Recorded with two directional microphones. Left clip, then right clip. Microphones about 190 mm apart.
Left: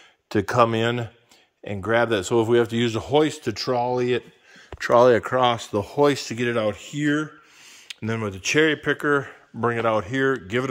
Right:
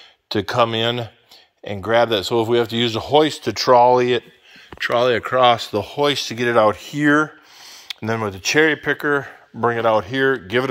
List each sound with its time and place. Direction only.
0.3 s speech: 25° left (ahead or behind); by 4.2 s 5° left (ahead or behind)
4.7 s speech: 30° left (ahead or behind)
5.9 s speech: 30° left (ahead or behind)
6.3 s speech: 10° left (ahead or behind)